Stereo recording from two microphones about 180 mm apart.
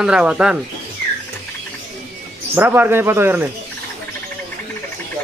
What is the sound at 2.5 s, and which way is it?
Speech, 10° right (ahead or behind).